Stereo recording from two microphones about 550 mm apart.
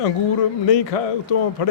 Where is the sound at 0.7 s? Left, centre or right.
Left.